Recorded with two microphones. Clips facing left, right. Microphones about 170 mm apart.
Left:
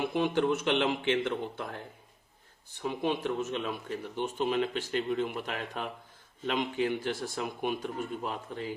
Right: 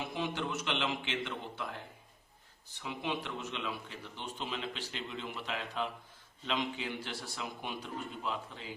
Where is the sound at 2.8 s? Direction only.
45° left (ahead or behind).